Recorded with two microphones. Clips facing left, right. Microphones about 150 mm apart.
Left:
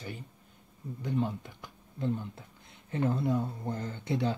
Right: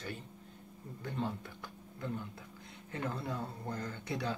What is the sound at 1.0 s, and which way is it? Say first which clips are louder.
Speech: left 6 dB; 15° left (ahead or behind).